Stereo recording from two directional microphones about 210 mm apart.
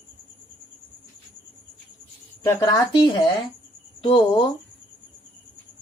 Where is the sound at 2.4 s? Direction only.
15° left (ahead or behind).